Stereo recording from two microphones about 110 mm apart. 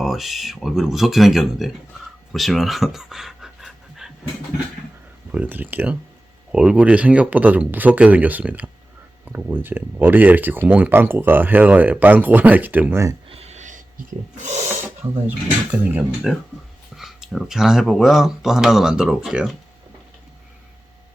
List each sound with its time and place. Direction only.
0.0 s speech: centre (ahead or behind)
2.3 s pant: centre (ahead or behind)
5.3 s speech: 15° right (ahead or behind)
13.2 s a sound: 65° right (ahead or behind)
14.4 s speech: 90° right
15.7 s speech: 15° right (ahead or behind)